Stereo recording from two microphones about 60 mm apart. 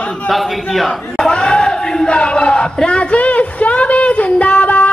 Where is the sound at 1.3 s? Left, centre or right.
Centre.